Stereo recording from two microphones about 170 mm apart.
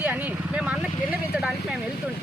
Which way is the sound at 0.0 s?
10° right (ahead or behind).